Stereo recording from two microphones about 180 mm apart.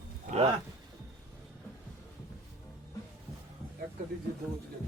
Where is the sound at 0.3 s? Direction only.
35° right (ahead or behind).